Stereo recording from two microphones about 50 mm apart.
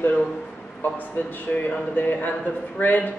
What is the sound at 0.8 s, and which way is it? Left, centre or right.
Speech, left.